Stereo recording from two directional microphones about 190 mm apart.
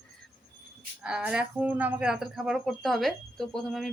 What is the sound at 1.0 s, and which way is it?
A woman's voice, 5° right (ahead or behind).